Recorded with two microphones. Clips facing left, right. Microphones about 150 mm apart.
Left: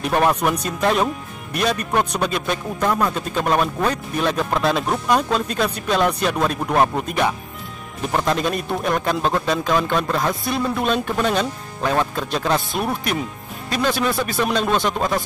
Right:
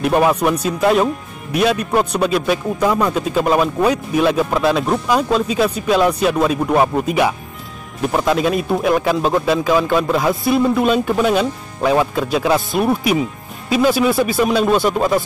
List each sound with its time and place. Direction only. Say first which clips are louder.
0.0 s speech: right 4 dB; 5° right (ahead or behind)